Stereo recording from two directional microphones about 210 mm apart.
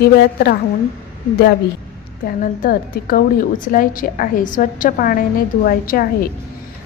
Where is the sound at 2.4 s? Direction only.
45° left (ahead or behind).